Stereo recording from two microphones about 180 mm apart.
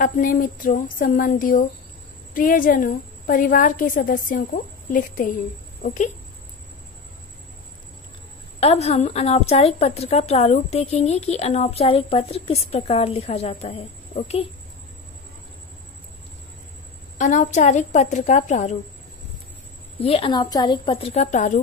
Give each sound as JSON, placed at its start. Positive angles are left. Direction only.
{"t": 0.0, "sound": "a woman's voice", "side_deg": 50}
{"t": 8.5, "sound": "a woman's voice", "side_deg": 35}
{"t": 17.2, "sound": "a woman's voice", "side_deg": 45}
{"t": 20.0, "sound": "a woman's voice", "side_deg": 30}